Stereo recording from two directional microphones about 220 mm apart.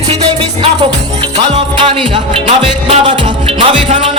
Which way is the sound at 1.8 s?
25° right (ahead or behind).